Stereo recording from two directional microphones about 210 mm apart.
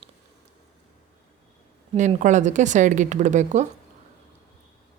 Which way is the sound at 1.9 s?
35° right (ahead or behind).